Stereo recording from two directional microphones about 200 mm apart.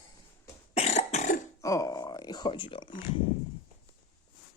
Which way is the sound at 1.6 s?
15° left (ahead or behind).